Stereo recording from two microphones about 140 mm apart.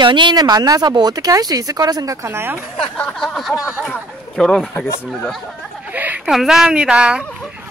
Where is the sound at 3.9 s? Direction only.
5° left (ahead or behind).